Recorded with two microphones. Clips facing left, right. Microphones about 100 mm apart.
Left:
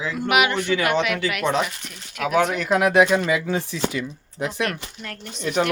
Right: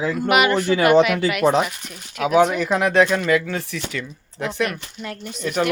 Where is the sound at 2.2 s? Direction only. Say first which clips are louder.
Right 4 dB; centre (ahead or behind); by 4.7 s 15° left (ahead or behind).